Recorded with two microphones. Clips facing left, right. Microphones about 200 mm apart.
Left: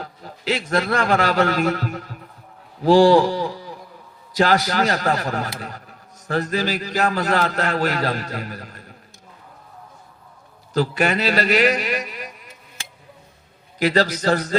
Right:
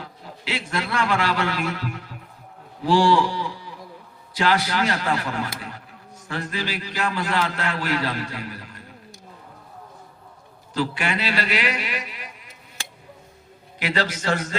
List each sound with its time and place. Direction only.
0.0 s a man's voice: 40° left (ahead or behind)
10.8 s a man's voice: 40° left (ahead or behind)
13.7 s a man's voice: 40° left (ahead or behind)